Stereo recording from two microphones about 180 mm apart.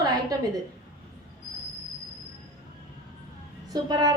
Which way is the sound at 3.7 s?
20° right (ahead or behind).